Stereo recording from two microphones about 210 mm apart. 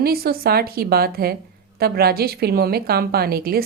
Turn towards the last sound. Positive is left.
turn(degrees=-45)  # may be behind; listen again after turning